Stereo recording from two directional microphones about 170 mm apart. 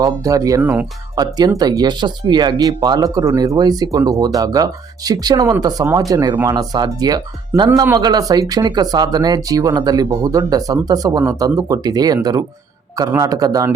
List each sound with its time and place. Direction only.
0.0 s speech: 20° right (ahead or behind)
0.6 s speech: 10° right (ahead or behind)
1.1 s speech: 25° right (ahead or behind)